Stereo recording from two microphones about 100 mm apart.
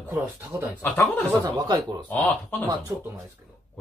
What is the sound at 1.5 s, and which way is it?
Speech, 40° right (ahead or behind).